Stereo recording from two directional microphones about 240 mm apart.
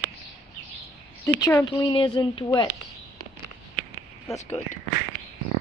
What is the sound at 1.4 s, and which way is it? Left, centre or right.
Speech, centre.